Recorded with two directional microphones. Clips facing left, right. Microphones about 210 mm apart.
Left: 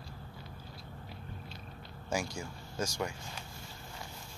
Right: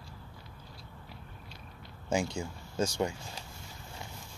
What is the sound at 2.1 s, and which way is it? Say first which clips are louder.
Speech: right 4 dB; 25° right (ahead or behind).